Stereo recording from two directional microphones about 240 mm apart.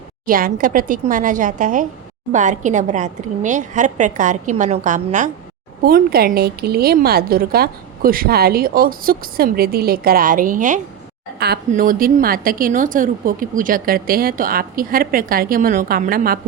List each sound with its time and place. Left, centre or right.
0.3 s a woman's voice: right